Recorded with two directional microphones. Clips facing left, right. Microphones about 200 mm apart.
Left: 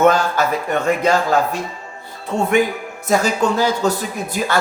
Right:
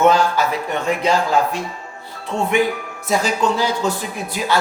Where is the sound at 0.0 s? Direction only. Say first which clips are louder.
Even; 50° left (ahead or behind).